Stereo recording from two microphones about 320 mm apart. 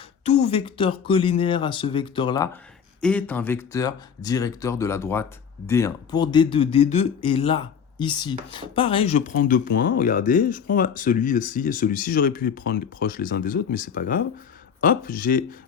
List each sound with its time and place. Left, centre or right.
0.3 s speech: centre